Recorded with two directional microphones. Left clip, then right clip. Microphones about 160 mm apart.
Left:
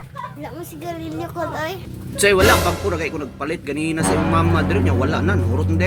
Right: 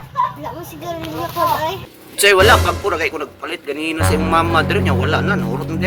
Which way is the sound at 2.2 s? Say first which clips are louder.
Right 4 dB; 10° left (ahead or behind).